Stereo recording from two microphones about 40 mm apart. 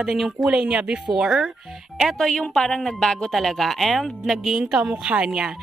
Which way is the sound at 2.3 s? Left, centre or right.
Centre.